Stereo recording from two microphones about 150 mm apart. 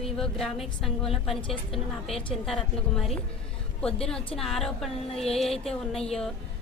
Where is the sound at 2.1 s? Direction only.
40° left (ahead or behind).